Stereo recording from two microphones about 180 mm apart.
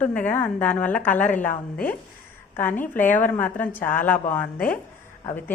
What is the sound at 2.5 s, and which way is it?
A woman's voice, 10° left (ahead or behind).